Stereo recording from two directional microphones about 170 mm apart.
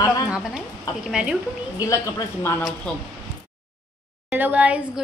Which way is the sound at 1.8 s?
20° left (ahead or behind).